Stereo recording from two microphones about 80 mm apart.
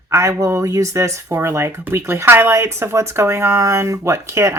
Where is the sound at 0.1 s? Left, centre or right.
Right.